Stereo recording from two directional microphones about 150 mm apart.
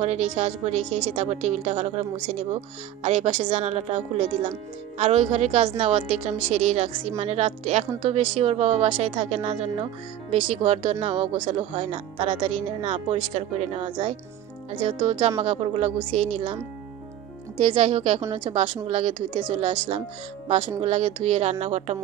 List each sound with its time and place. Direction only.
0.0 s a woman's voice: 45° right (ahead or behind)
15.4 s speech: 40° right (ahead or behind)
17.6 s speech: 40° right (ahead or behind)
20.4 s a woman's voice: 55° right (ahead or behind)